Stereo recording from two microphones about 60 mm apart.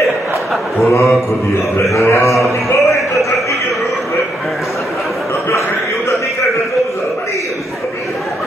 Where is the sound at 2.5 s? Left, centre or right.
Left.